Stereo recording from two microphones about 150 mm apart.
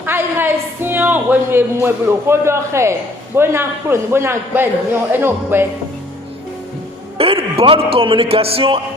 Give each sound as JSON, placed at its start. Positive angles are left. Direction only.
{"t": 0.0, "sound": "speech", "side_deg": -15}
{"t": 7.2, "sound": "a man's voice", "side_deg": -40}